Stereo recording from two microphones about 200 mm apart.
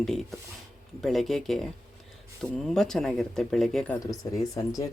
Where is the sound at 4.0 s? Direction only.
15° left (ahead or behind).